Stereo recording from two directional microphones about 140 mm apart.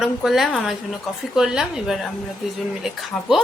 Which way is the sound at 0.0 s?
Centre (ahead or behind).